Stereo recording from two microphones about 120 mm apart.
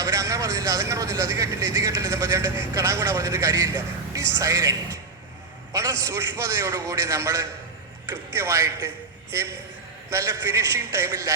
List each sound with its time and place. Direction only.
0.0 s speech: 25° right (ahead or behind)